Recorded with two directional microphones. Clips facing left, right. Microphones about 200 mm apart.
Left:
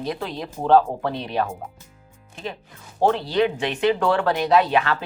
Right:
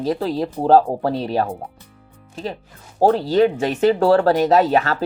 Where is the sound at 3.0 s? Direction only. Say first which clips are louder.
Right 5 dB; 40° right (ahead or behind).